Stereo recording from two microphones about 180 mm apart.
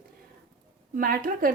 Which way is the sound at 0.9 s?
50° right (ahead or behind).